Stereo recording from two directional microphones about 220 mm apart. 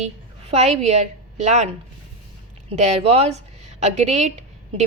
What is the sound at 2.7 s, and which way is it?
A woman's voice, 30° right (ahead or behind).